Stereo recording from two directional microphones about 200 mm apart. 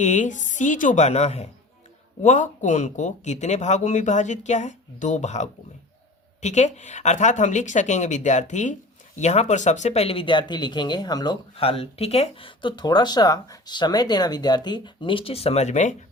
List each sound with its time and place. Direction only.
0.0 s speech: 35° left (ahead or behind)